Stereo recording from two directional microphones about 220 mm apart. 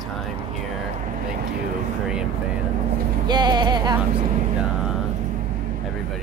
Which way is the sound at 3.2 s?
20° right (ahead or behind).